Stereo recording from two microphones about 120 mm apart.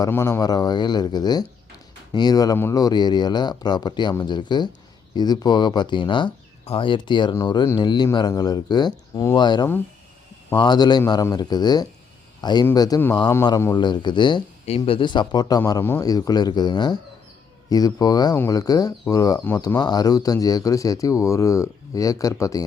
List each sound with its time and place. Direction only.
0.1 s a man's voice: 25° left (ahead or behind)
15.8 s speech: 20° left (ahead or behind)
16.0 s speech: 30° left (ahead or behind)